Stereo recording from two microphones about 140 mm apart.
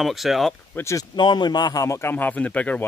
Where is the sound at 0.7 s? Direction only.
20° left (ahead or behind).